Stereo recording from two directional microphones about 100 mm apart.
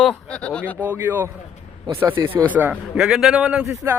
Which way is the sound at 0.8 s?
20° right (ahead or behind).